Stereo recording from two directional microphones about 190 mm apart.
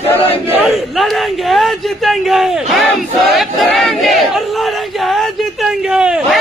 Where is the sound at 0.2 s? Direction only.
30° left (ahead or behind).